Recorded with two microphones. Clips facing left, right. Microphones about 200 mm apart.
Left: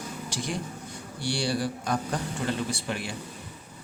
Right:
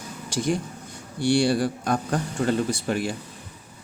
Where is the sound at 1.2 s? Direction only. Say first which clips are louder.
Right 8 dB; 55° right (ahead or behind).